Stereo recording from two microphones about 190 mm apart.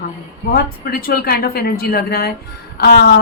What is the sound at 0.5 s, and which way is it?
A woman's voice, 55° left (ahead or behind).